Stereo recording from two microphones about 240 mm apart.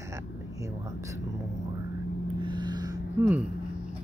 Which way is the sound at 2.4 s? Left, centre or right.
Centre.